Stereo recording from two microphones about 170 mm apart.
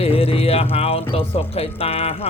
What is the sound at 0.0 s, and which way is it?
Speech, 35° left (ahead or behind).